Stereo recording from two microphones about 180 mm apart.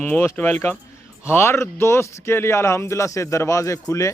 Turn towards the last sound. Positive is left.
turn(degrees=15)  # may be behind; listen again after turning